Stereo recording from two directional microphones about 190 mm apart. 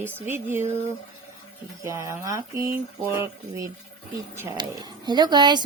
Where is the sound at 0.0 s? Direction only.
10° right (ahead or behind).